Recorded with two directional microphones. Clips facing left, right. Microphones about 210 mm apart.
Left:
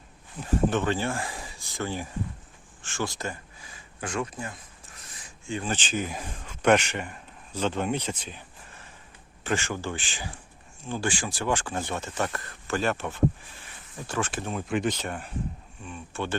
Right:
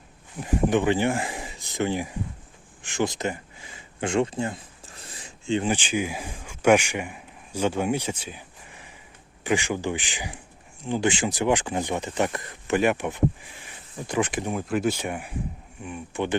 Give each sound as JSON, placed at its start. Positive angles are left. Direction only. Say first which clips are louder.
{"t": 0.3, "sound": "speech", "louder": "right 3 dB", "side_deg": -15}
{"t": 2.8, "sound": "a sound", "louder": "right 6 dB", "side_deg": -20}
{"t": 5.7, "sound": "a man's voice", "louder": "right 4 dB", "side_deg": -10}